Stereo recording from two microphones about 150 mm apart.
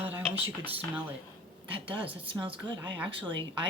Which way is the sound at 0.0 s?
10° right (ahead or behind).